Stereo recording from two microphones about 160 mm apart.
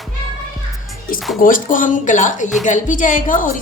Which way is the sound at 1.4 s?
60° left (ahead or behind).